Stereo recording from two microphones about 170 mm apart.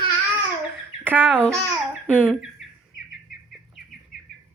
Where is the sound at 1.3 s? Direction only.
5° left (ahead or behind).